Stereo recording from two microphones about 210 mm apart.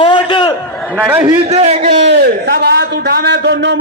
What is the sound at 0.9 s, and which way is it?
Speech, 10° right (ahead or behind).